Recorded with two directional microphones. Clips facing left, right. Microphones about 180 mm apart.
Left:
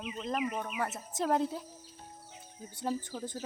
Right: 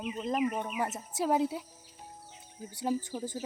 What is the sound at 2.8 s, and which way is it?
Speech, 10° right (ahead or behind).